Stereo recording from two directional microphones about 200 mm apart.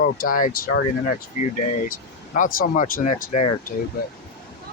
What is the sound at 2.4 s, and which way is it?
Speech, 45° left (ahead or behind).